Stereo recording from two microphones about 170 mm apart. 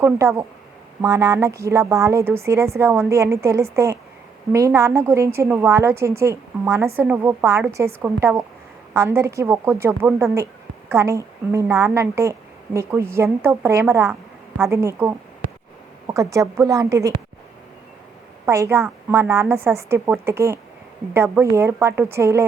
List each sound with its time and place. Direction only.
0.0 s a woman's voice: 15° right (ahead or behind)
18.4 s a woman's voice: 15° right (ahead or behind)